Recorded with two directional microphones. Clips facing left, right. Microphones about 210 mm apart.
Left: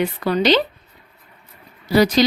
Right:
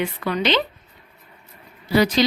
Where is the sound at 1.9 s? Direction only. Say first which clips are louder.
Left 3 dB; 40° left (ahead or behind).